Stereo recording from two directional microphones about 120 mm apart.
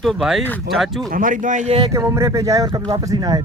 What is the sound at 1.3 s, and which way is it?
Speech, 90° right.